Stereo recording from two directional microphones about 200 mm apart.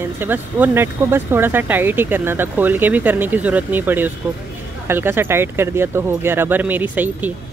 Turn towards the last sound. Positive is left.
turn(degrees=-10)  # may be behind; listen again after turning